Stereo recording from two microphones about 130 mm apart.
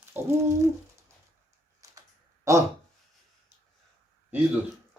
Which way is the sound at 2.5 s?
25° right (ahead or behind).